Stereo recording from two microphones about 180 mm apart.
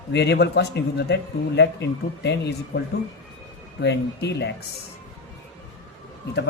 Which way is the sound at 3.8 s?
70° left (ahead or behind).